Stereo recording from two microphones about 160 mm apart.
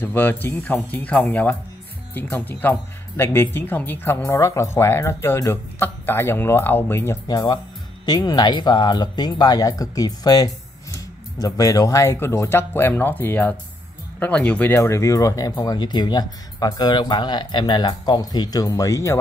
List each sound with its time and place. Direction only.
0.0 s speech: 10° left (ahead or behind)
7.2 s speech: 25° left (ahead or behind)